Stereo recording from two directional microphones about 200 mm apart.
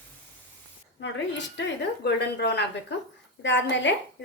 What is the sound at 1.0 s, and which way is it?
Dishes, 65° left (ahead or behind).